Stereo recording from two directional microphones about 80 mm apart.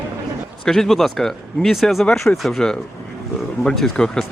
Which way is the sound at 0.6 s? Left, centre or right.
Centre.